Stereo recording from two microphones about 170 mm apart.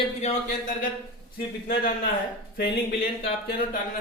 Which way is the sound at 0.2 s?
40° left (ahead or behind).